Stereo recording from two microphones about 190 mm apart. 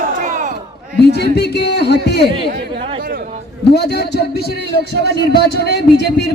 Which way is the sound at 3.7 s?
60° left (ahead or behind).